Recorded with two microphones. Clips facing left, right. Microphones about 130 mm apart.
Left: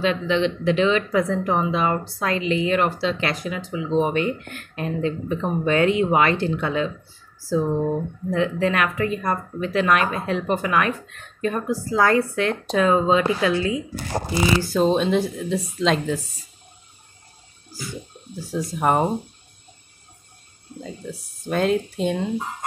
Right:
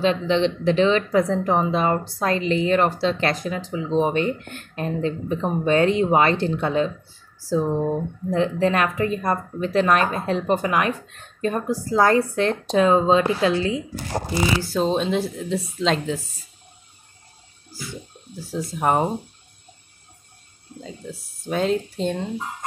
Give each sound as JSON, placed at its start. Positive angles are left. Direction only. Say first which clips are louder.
{"t": 0.0, "sound": "speech", "louder": "right 1 dB", "side_deg": -30}
{"t": 7.4, "sound": "speech", "louder": "even", "side_deg": -20}
{"t": 8.3, "sound": "speech", "louder": "right 1 dB", "side_deg": -30}
{"t": 14.6, "sound": "a woman's voice", "louder": "left 2 dB", "side_deg": 0}
{"t": 18.5, "sound": "a woman's voice", "louder": "left 1 dB", "side_deg": 0}
{"t": 20.8, "sound": "a woman's voice", "louder": "left 2 dB", "side_deg": 0}